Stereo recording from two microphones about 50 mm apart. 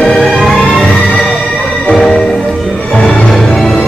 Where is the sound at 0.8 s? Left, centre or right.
Centre.